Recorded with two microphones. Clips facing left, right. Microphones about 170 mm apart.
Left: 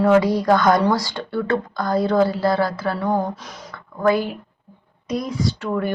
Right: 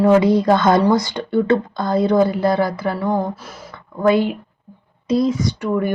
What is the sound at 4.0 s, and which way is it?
Speech, 25° right (ahead or behind).